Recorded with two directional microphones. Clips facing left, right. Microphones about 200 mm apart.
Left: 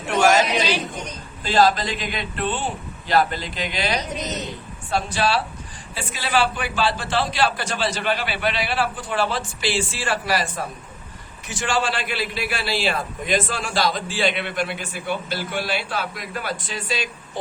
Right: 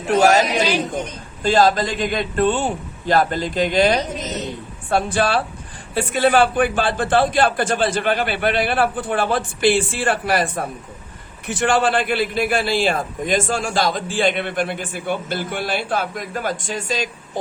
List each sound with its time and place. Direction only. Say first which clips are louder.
0.1 s a man's voice: right 3 dB; 40° right (ahead or behind)